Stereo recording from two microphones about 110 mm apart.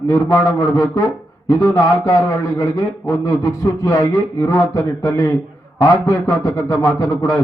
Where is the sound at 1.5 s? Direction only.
25° left (ahead or behind).